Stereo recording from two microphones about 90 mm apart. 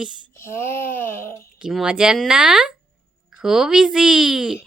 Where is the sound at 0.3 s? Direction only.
30° left (ahead or behind).